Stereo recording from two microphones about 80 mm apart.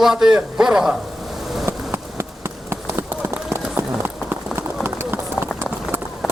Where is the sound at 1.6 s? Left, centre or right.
Right.